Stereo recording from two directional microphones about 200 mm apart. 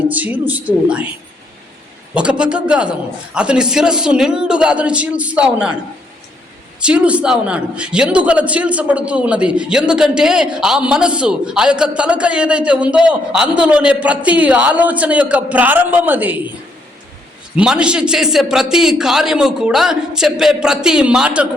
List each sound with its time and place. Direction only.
0.1 s a woman's voice: 10° right (ahead or behind)
2.4 s a man's voice: 5° right (ahead or behind)
6.7 s a man's voice: 5° right (ahead or behind)
17.6 s a man's voice: 5° right (ahead or behind)